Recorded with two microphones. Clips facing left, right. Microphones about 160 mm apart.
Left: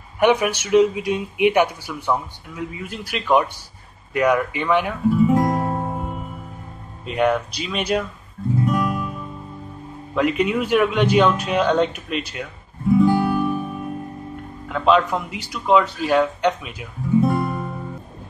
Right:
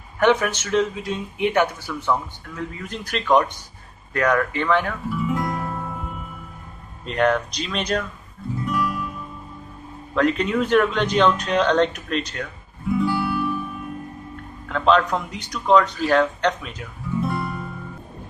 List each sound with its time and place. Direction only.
0.2 s speech: 10° left (ahead or behind)
5.2 s music: 45° left (ahead or behind)
7.1 s speech: 10° left (ahead or behind)
8.6 s music: 45° left (ahead or behind)
10.1 s speech: 10° left (ahead or behind)
13.0 s music: 45° left (ahead or behind)
14.7 s speech: 5° left (ahead or behind)
17.2 s music: 45° left (ahead or behind)